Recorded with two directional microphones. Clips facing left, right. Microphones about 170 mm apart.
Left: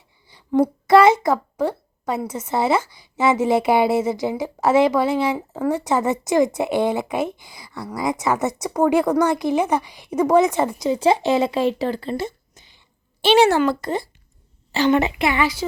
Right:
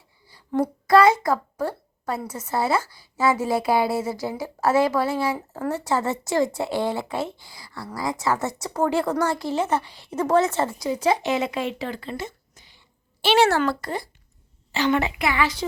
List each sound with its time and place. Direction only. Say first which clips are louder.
0.3 s speech: left 5 dB; 20° left (ahead or behind)
14.7 s a woman's voice: left 4 dB; 30° left (ahead or behind)
14.9 s speech: left 4 dB; 20° left (ahead or behind)